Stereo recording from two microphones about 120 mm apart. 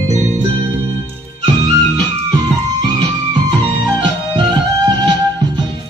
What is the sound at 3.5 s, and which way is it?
Music, 40° right (ahead or behind).